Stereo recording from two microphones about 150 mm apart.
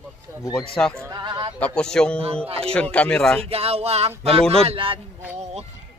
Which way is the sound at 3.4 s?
40° right (ahead or behind).